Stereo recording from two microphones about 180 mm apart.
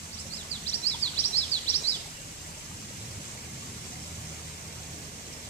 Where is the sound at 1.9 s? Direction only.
85° left.